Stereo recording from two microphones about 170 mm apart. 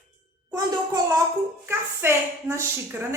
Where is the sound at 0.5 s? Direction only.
20° right (ahead or behind).